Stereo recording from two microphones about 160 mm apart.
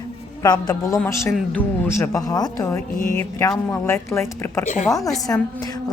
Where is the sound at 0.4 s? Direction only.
25° left (ahead or behind).